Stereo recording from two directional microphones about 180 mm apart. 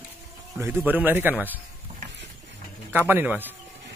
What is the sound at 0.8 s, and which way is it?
Speech, 10° right (ahead or behind).